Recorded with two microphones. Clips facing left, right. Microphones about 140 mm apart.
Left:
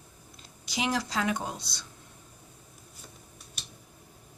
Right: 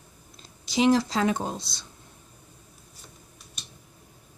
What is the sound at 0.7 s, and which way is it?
Speech, 30° right (ahead or behind).